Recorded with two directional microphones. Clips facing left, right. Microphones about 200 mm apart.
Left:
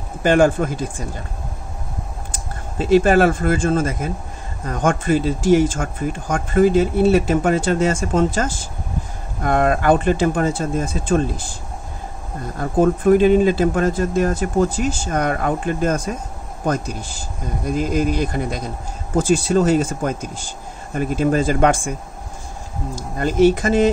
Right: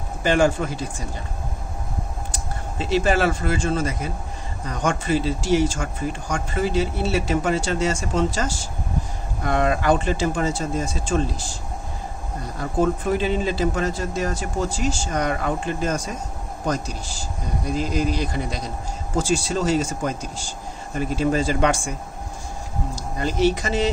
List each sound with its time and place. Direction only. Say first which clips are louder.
0.2 s speech: left 4 dB; 50° left (ahead or behind)
2.8 s speech: left 7 dB; 50° left (ahead or behind)
12.5 s speech: left 5 dB; 50° left (ahead or behind)
22.9 s speech: left 7 dB; 50° left (ahead or behind)